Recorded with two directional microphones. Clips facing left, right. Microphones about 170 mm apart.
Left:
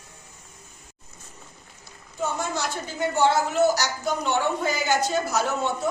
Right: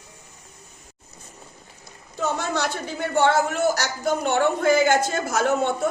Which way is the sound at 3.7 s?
55° right (ahead or behind).